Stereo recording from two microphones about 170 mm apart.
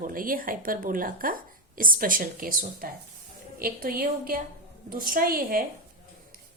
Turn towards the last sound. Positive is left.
turn(degrees=-55)  # may be behind; listen again after turning